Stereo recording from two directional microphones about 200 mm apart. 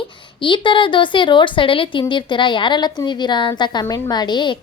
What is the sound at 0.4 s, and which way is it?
A woman's voice, 25° left (ahead or behind).